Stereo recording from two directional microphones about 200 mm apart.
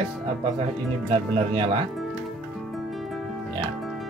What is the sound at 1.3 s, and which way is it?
Speech, 30° right (ahead or behind).